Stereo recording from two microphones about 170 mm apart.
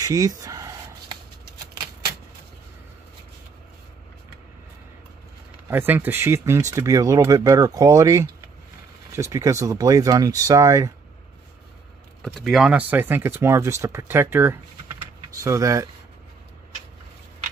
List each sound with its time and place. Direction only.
0.0 s a sound: 20° right (ahead or behind)
5.7 s speech: 15° right (ahead or behind)
12.4 s speech: centre (ahead or behind); by 15.9 s 15° right (ahead or behind)